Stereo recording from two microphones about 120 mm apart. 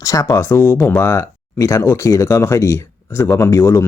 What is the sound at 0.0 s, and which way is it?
Speech, 30° left (ahead or behind).